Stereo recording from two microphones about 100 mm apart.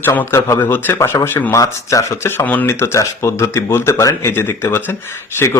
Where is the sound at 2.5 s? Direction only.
15° left (ahead or behind).